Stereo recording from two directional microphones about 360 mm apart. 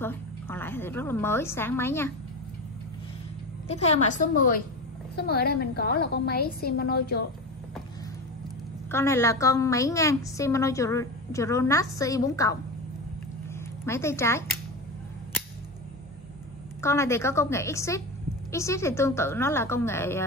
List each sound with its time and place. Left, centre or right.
0.0 s a woman's voice: centre
3.6 s a woman's voice: centre
8.9 s a woman's voice: centre
13.8 s a woman's voice: centre
16.8 s a woman's voice: centre